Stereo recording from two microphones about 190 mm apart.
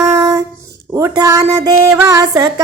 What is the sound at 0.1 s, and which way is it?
Dog, 20° right (ahead or behind).